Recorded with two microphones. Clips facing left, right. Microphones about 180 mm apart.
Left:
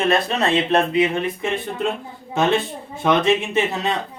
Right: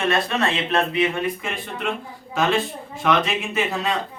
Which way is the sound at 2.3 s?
25° left (ahead or behind).